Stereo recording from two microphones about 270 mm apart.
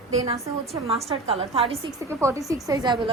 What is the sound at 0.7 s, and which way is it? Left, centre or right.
A woman's voice, right.